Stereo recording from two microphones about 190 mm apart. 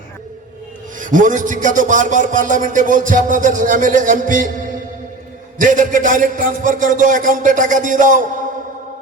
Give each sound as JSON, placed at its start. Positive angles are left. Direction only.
{"t": 0.9, "sound": "a man's voice", "side_deg": -45}